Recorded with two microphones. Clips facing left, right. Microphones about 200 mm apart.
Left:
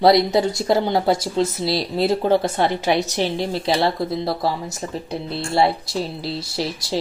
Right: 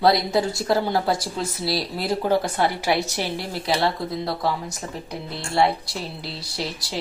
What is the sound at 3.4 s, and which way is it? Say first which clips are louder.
A woman's voice: left 2 dB; 30° left (ahead or behind).